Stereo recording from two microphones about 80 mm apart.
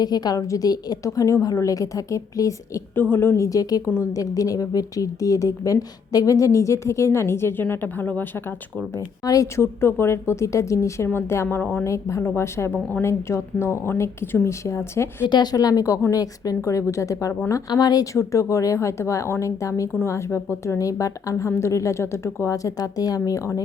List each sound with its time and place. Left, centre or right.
0.0 s a woman's voice: left
2.9 s speech: left
9.0 s a woman's voice: left
11.9 s speech: left
15.3 s a woman's voice: left
16.6 s speech: left
17.7 s speech: left